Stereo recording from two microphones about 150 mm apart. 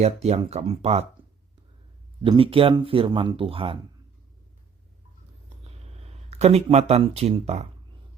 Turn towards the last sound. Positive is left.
turn(degrees=-45)  # may be behind; listen again after turning